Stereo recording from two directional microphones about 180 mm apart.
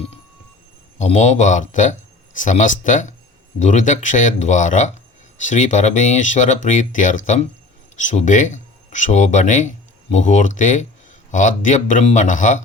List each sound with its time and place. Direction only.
0.9 s speech: 40° left (ahead or behind)